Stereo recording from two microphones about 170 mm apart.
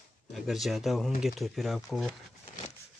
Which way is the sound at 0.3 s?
Centre (ahead or behind).